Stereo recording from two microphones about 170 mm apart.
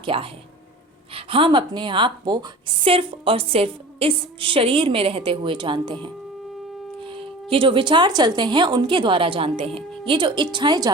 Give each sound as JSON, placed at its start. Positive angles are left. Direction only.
{"t": 0.0, "sound": "a woman's voice", "side_deg": -30}